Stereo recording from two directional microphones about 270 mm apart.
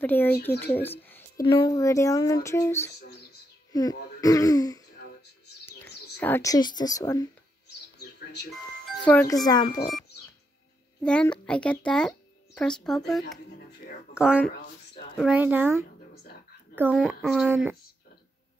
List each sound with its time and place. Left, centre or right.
0.0 s a woman's voice: centre
3.0 s speech: left
4.2 s a woman's voice: centre
5.7 s bird: centre
6.1 s a woman's voice: centre
8.0 s a sound: left
9.0 s a woman's voice: centre
11.0 s a child's voice: centre